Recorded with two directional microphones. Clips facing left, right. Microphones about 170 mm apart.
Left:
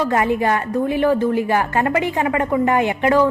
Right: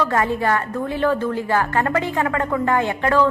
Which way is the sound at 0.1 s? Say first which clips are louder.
Left 2 dB; 20° left (ahead or behind).